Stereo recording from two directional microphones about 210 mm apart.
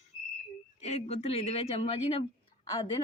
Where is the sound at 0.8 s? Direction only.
30° left (ahead or behind).